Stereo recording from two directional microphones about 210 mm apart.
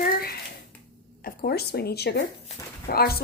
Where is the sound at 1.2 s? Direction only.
45° left (ahead or behind).